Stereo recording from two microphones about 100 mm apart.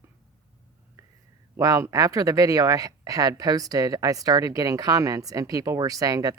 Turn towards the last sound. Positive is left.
turn(degrees=-35)  # may be behind; listen again after turning